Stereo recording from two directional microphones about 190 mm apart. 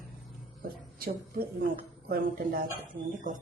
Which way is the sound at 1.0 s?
50° right (ahead or behind).